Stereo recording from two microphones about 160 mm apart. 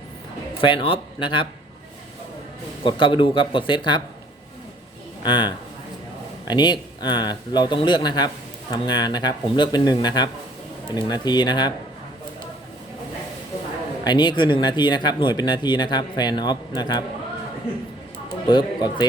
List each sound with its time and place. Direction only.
0.6 s speech: 30° left (ahead or behind)
2.8 s speech: 30° left (ahead or behind)
5.2 s speech: 25° left (ahead or behind)
14.0 s speech: 25° left (ahead or behind)
18.4 s speech: 25° left (ahead or behind)